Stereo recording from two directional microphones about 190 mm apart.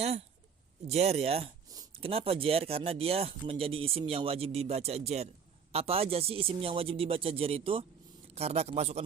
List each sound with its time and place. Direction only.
0.0 s a man's voice: 35° right (ahead or behind)